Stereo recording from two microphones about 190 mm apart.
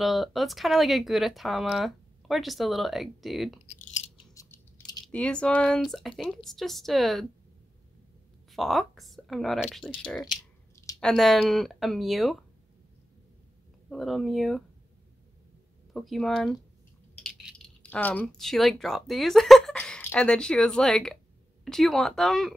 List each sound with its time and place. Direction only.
0.0 s speech: centre (ahead or behind)
3.6 s a sound: 35° left (ahead or behind)
4.3 s a sound: 15° left (ahead or behind)
5.0 s speech: 5° left (ahead or behind)
8.5 s speech: centre (ahead or behind)
13.8 s speech: centre (ahead or behind)
15.9 s speech: centre (ahead or behind)